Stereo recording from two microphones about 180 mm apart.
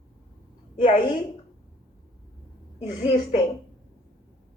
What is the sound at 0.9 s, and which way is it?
Speech, 25° left (ahead or behind).